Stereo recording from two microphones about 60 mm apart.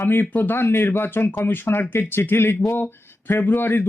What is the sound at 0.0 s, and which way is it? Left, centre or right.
Speech, left.